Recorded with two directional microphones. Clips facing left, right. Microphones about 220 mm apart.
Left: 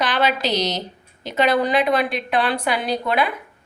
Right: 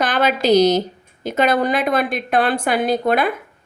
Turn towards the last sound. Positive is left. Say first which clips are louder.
# right 4 dB
turn(degrees=-50)  # may be behind; listen again after turning